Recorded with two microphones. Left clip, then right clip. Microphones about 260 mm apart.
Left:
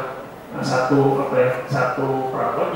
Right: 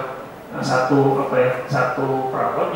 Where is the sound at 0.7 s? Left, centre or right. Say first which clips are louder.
Right 1 dB; centre.